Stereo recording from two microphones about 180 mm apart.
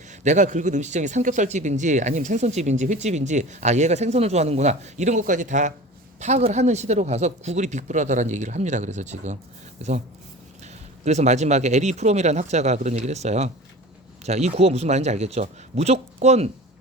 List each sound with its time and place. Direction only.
0.3 s speech: 40° right (ahead or behind)
11.0 s speech: 40° right (ahead or behind)